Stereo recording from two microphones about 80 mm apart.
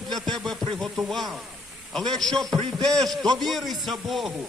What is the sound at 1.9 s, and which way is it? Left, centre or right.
A man's voice, centre.